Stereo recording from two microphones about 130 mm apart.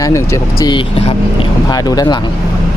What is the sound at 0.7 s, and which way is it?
Speech, 45° left (ahead or behind).